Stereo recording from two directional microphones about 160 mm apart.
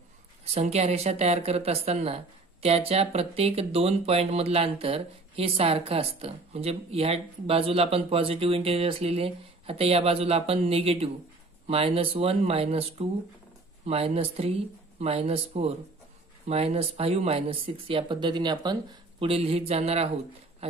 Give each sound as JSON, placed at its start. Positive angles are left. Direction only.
{"t": 0.6, "sound": "speech", "side_deg": -40}